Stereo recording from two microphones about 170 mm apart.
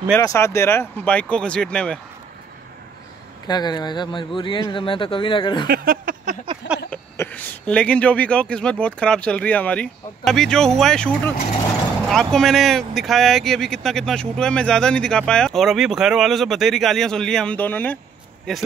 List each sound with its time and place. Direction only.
0.2 s speech: 20° left (ahead or behind)
3.4 s speech: 25° left (ahead or behind)
5.7 s a sound: 55° right (ahead or behind)
6.9 s speech: 10° left (ahead or behind)